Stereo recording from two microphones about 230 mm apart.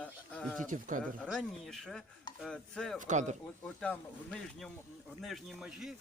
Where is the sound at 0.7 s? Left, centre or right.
Right.